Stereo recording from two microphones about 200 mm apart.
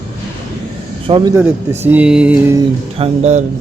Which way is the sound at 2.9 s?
30° right (ahead or behind).